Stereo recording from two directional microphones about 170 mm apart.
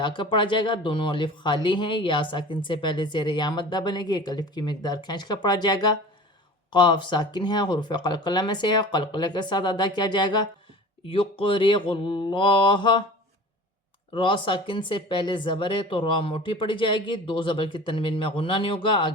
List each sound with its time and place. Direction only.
0.0 s speech: 30° left (ahead or behind)
14.1 s speech: 30° left (ahead or behind)